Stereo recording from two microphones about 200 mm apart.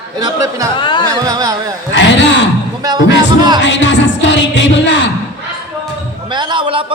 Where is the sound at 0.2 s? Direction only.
20° right (ahead or behind).